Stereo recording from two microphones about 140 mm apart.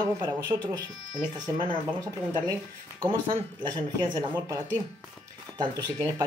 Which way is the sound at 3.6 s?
30° right (ahead or behind).